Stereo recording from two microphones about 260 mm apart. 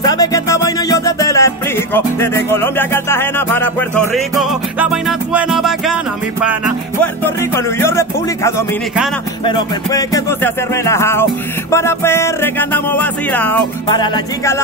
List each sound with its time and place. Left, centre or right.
0.0 s music: centre
7.5 s music: centre